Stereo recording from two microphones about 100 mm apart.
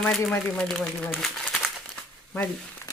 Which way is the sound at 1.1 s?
5° left (ahead or behind).